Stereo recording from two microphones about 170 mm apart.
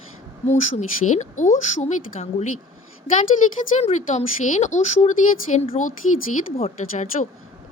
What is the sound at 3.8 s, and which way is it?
A woman's voice, 40° left (ahead or behind).